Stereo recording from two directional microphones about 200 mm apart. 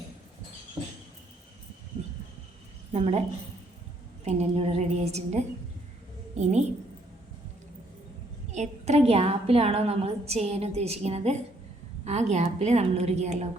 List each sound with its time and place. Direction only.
2.9 s a woman's voice: 35° right (ahead or behind)
6.4 s a woman's voice: 35° right (ahead or behind)
8.5 s a woman's voice: 35° right (ahead or behind)